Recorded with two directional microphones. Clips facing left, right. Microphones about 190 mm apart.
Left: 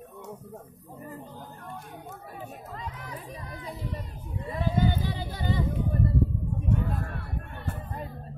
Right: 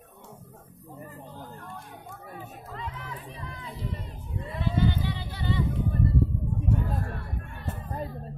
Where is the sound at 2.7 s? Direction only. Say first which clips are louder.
Right 3 dB; 40° left (ahead or behind).